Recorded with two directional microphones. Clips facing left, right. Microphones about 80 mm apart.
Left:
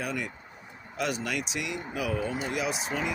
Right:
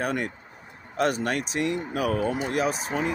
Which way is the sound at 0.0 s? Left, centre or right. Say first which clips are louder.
Right 5 dB; right.